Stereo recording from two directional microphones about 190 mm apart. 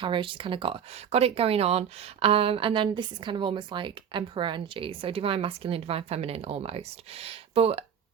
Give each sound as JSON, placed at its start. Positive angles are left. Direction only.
{"t": 0.0, "sound": "a woman's voice", "side_deg": -25}